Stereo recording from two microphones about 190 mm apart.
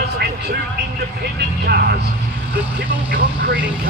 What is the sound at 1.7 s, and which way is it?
Speech, 55° right (ahead or behind).